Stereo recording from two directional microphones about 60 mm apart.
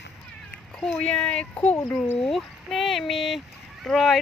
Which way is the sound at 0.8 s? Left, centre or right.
Centre.